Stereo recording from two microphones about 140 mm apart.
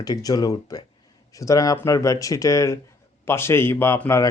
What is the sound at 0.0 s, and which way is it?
Speech, 25° left (ahead or behind).